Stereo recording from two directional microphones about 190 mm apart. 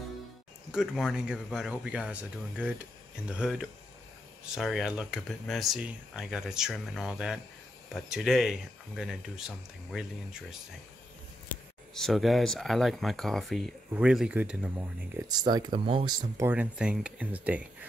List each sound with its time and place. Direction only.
0.7 s speech: 5° right (ahead or behind)
11.9 s speech: centre (ahead or behind)
15.2 s speech: 20° right (ahead or behind)
16.3 s speech: 10° right (ahead or behind)